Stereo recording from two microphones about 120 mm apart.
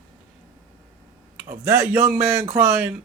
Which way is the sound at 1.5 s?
20° right (ahead or behind).